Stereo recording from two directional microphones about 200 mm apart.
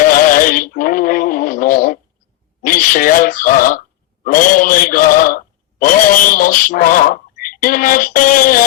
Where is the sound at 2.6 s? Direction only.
45° left (ahead or behind).